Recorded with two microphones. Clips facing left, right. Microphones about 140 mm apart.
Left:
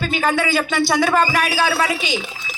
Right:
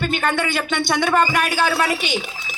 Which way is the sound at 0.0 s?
5° left (ahead or behind).